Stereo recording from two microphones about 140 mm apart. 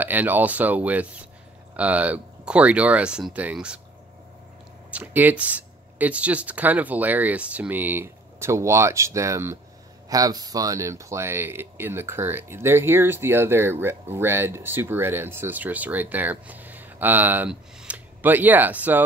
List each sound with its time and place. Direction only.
0.0 s speech: 15° right (ahead or behind)
4.9 s speech: 10° right (ahead or behind)